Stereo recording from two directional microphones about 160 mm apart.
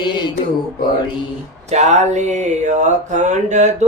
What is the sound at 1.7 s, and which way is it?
Mantra, 45° right (ahead or behind).